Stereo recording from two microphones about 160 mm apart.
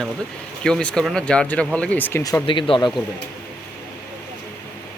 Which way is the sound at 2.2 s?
20° left (ahead or behind).